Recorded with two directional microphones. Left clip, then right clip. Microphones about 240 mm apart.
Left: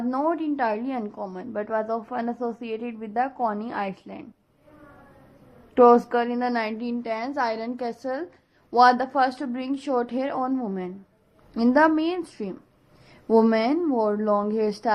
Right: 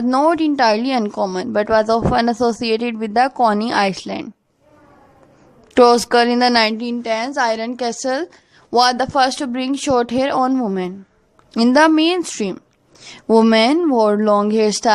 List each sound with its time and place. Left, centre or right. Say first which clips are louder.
0.1 s a woman's voice: right 11 dB; right
5.7 s a woman's voice: right 5 dB; right